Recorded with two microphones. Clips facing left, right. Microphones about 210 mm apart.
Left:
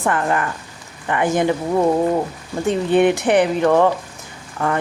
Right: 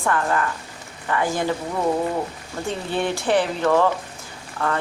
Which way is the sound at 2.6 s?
20° left (ahead or behind).